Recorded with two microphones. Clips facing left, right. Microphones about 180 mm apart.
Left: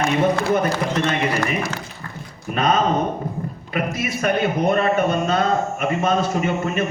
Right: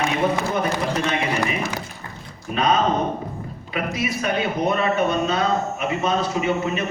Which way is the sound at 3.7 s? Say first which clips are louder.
Even; 50° left (ahead or behind).